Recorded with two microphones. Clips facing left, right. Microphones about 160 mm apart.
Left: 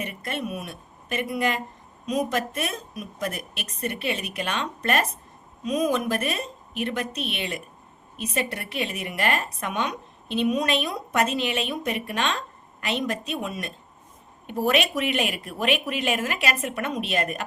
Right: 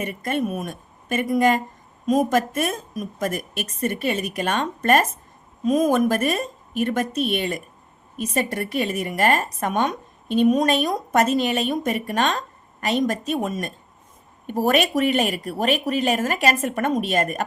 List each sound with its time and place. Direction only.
0.0 s a woman's voice: 45° right (ahead or behind)